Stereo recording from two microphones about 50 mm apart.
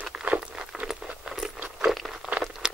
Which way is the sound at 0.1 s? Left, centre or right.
Right.